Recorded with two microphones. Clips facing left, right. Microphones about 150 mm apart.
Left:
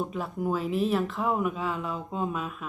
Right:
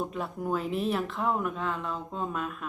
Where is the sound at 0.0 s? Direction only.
Centre (ahead or behind).